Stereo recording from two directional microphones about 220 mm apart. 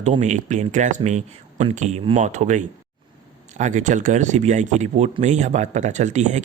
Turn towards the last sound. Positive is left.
turn(degrees=-30)  # may be behind; listen again after turning